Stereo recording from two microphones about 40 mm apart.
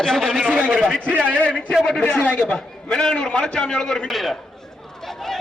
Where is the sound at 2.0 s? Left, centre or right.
Left.